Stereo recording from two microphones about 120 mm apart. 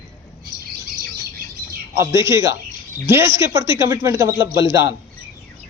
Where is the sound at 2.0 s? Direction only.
25° right (ahead or behind).